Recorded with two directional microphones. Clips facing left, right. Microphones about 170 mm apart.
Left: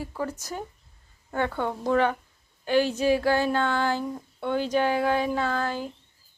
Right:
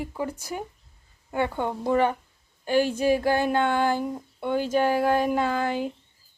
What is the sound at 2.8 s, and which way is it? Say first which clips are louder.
Speech: right 1 dB; 50° right (ahead or behind).